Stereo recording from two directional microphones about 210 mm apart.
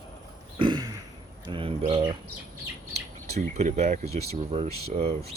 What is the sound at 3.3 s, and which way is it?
Speech, 30° right (ahead or behind).